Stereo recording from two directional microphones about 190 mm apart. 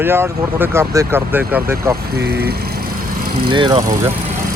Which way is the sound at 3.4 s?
25° right (ahead or behind).